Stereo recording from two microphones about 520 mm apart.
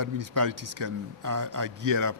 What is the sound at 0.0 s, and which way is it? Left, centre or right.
A man's voice, right.